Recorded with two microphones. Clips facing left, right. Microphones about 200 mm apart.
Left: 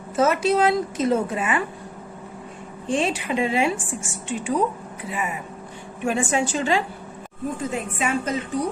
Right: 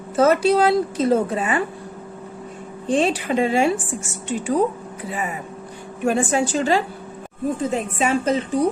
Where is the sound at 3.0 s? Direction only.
35° right (ahead or behind).